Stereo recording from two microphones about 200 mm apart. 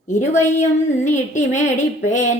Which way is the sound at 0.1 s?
35° left (ahead or behind).